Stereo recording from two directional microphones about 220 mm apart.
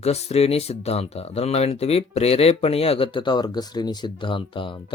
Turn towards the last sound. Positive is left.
turn(degrees=20)  # may be behind; listen again after turning